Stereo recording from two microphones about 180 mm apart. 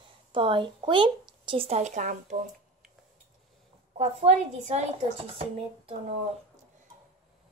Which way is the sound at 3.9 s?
40° right (ahead or behind).